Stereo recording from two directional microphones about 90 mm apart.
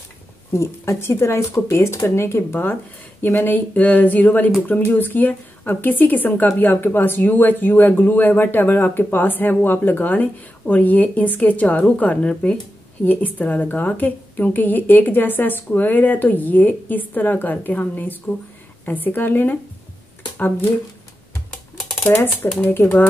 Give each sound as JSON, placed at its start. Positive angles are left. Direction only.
{"t": 0.5, "sound": "a woman's voice", "side_deg": 30}
{"t": 21.9, "sound": "a woman's voice", "side_deg": 20}